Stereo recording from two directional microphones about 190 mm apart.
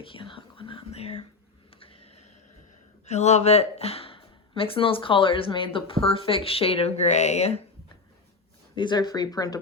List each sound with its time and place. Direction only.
0.0 s whispering: 25° left (ahead or behind)
1.8 s a sound: 30° left (ahead or behind)
3.1 s speech: 35° left (ahead or behind)
8.7 s speech: 25° left (ahead or behind)